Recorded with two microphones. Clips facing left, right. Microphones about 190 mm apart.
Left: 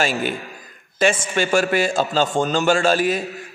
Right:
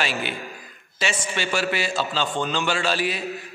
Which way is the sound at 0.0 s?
45° left (ahead or behind).